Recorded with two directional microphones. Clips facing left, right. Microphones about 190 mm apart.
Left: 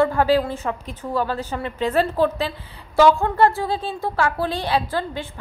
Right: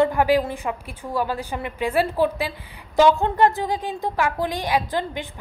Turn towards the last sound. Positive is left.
turn(degrees=-15)  # may be behind; listen again after turning